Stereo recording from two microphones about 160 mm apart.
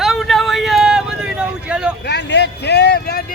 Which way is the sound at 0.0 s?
Centre (ahead or behind).